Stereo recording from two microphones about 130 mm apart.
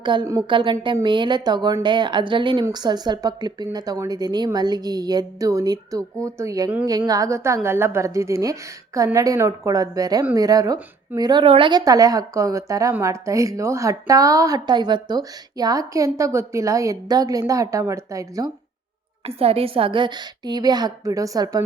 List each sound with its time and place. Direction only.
0.0 s a woman's voice: 35° right (ahead or behind)
11.4 s a woman's voice: 40° right (ahead or behind)
11.9 s a woman's voice: 25° right (ahead or behind)
19.2 s a woman's voice: 50° right (ahead or behind); by 21.6 s 30° right (ahead or behind)